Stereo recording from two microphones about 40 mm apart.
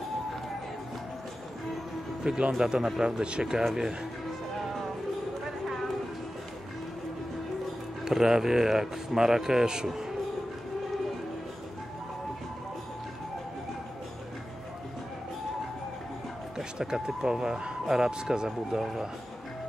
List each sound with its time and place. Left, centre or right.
2.2 s speech: right
2.6 s speech: centre
8.0 s speech: centre
16.5 s speech: centre